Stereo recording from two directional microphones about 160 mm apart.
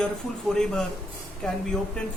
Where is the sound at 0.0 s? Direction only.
5° left (ahead or behind).